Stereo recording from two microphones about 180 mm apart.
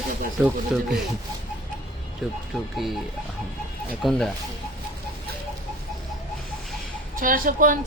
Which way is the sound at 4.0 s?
Centre (ahead or behind).